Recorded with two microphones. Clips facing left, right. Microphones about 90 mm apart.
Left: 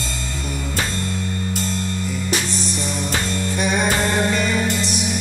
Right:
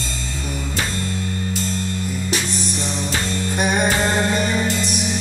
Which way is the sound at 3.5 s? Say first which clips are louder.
Right 2 dB; 50° right (ahead or behind).